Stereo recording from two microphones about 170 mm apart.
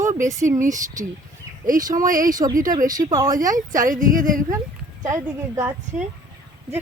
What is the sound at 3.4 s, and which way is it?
A woman's voice, 50° right (ahead or behind).